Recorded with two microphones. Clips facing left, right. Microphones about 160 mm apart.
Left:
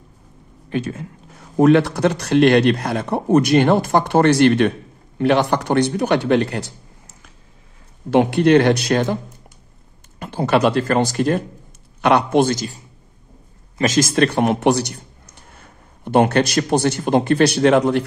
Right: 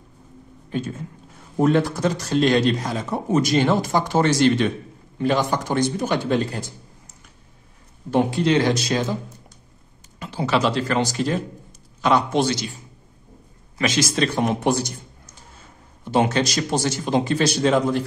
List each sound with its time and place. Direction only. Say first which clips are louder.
0.7 s speech: left 4 dB; 80° left
8.1 s speech: left 6 dB; 70° left (ahead or behind)
10.1 s a man's voice: left 4 dB; 55° left (ahead or behind)
13.7 s speech: left 5 dB; 45° left (ahead or behind); by 18.0 s 65° left (ahead or behind)